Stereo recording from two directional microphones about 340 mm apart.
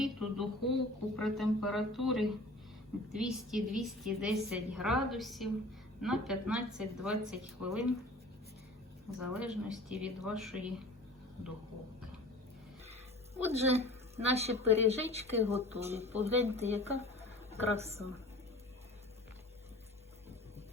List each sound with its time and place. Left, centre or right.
0.0 s a woman's voice: centre
9.1 s a woman's voice: centre
13.3 s a woman's voice: centre